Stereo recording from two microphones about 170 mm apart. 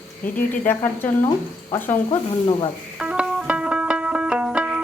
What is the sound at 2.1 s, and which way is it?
Speech, 30° left (ahead or behind).